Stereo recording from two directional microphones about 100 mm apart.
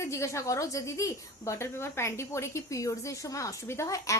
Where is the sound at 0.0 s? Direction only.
30° left (ahead or behind).